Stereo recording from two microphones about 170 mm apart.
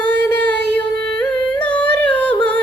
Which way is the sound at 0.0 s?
5° left (ahead or behind).